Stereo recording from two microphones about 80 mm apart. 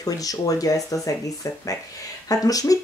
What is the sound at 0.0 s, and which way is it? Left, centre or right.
Speech, left.